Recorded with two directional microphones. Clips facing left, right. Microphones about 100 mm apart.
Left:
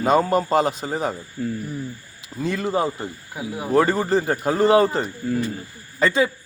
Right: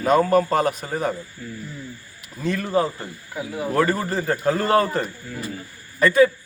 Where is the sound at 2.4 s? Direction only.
20° left (ahead or behind).